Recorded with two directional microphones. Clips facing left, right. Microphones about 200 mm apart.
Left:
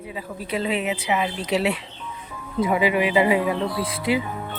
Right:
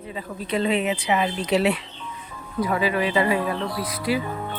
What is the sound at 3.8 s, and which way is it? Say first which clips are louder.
Music: left 2 dB; 25° left (ahead or behind).